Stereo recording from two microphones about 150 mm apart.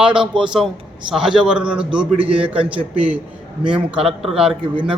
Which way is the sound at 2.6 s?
35° right (ahead or behind).